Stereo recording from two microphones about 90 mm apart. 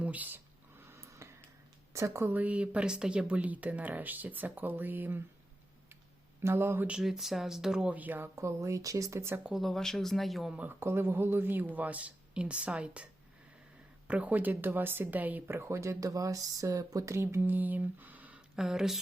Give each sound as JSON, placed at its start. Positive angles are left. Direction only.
{"t": 0.0, "sound": "speech", "side_deg": -15}
{"t": 0.9, "sound": "a sound", "side_deg": -35}
{"t": 1.9, "sound": "speech", "side_deg": -35}
{"t": 2.3, "sound": "speech", "side_deg": -15}
{"t": 6.4, "sound": "speech", "side_deg": -25}
{"t": 6.8, "sound": "speech", "side_deg": -5}
{"t": 8.4, "sound": "speech", "side_deg": -35}
{"t": 9.5, "sound": "speech", "side_deg": 0}
{"t": 10.5, "sound": "speech", "side_deg": -20}
{"t": 14.1, "sound": "speech", "side_deg": -15}
{"t": 17.2, "sound": "speech", "side_deg": -25}
{"t": 18.5, "sound": "speech", "side_deg": -5}